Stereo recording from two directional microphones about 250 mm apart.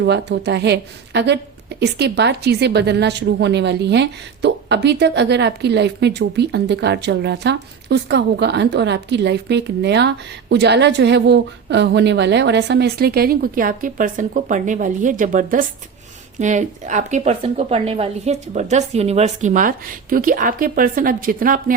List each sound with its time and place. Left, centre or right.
0.0 s a woman's voice: right